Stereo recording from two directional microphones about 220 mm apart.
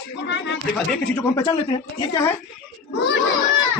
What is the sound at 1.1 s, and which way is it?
Speech, 15° left (ahead or behind).